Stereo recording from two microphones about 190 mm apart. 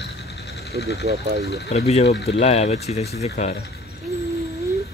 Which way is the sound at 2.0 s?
60° left (ahead or behind).